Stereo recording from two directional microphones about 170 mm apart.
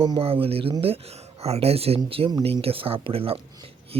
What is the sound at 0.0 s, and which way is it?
Speech, 30° right (ahead or behind).